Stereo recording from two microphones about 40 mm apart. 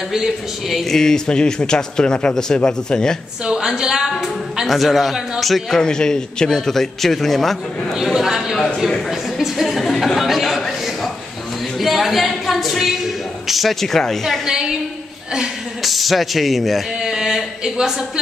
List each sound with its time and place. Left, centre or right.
0.1 s speech: centre
0.8 s a man's voice: centre
1.2 s speech: left
3.4 s a woman's voice: centre
4.6 s speech: centre
5.7 s a man's voice: centre
7.9 s speech: centre
8.5 s a man's voice: centre
9.4 s a sound: centre
11.8 s a sound: centre
13.8 s a man's voice: centre
14.4 s speech: centre
15.8 s speech: centre